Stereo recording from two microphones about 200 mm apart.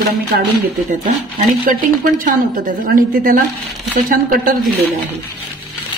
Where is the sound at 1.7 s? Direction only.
45° right (ahead or behind).